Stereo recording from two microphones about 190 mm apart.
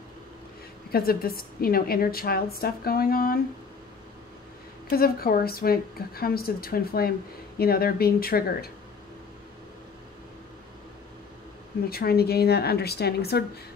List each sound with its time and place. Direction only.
0.9 s a woman's voice: 50° left (ahead or behind)
4.8 s a woman's voice: 50° left (ahead or behind)
11.9 s speech: 55° left (ahead or behind)